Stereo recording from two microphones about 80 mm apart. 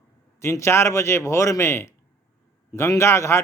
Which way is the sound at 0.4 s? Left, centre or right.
Left.